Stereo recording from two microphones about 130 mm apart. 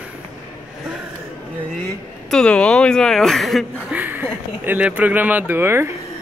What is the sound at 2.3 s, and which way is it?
Speech, 5° left (ahead or behind).